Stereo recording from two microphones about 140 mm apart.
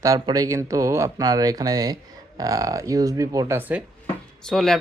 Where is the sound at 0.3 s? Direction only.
25° right (ahead or behind).